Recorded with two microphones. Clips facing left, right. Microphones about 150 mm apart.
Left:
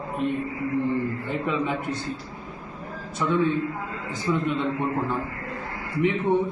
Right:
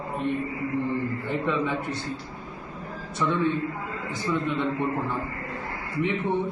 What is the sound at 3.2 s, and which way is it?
A man's voice, 15° left (ahead or behind).